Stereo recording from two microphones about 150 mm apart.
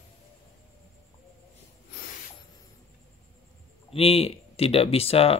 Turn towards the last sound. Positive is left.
turn(degrees=40)  # may be behind; listen again after turning